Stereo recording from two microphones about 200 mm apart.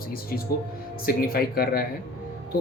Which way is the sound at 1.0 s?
50° left (ahead or behind).